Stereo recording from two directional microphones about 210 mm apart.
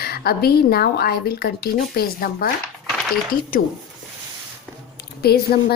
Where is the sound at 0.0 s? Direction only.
45° left (ahead or behind).